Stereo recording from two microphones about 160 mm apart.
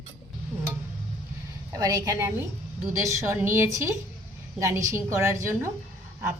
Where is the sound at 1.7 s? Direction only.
20° right (ahead or behind).